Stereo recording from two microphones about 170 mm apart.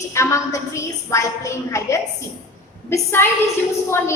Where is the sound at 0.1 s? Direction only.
15° left (ahead or behind).